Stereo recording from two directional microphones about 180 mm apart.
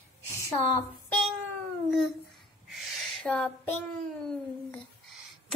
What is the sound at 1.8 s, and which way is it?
Babbling, centre (ahead or behind).